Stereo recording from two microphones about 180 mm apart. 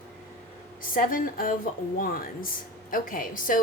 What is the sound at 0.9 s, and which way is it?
A woman's voice, 50° left (ahead or behind).